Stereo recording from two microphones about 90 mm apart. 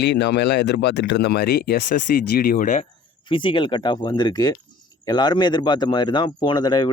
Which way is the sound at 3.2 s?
65° left (ahead or behind).